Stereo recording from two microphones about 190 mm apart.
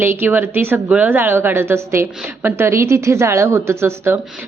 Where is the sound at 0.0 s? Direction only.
10° right (ahead or behind).